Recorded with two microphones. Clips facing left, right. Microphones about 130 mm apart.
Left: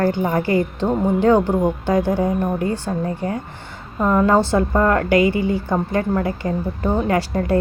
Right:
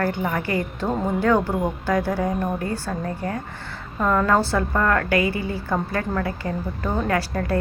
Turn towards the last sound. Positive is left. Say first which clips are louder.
# left 4 dB
turn(degrees=25)  # may be behind; listen again after turning